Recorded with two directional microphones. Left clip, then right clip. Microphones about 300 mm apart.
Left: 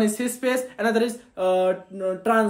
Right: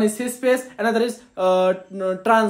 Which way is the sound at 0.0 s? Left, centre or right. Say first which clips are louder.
Right 3 dB; centre.